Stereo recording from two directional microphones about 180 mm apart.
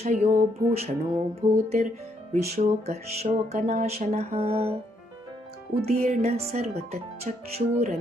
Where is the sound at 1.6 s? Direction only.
45° right (ahead or behind).